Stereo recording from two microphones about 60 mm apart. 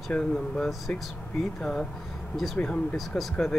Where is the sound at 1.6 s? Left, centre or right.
Centre.